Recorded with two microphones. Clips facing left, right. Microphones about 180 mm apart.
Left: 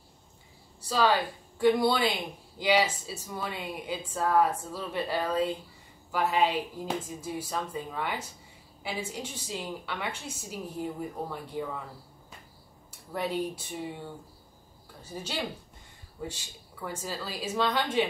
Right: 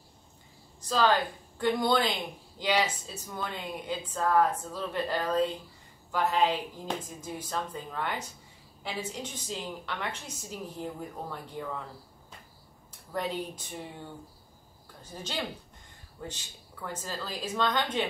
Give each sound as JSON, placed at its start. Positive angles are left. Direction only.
{"t": 0.7, "sound": "a woman's voice", "side_deg": 5}
{"t": 13.1, "sound": "a woman's voice", "side_deg": 5}
{"t": 15.1, "sound": "a woman's voice", "side_deg": 10}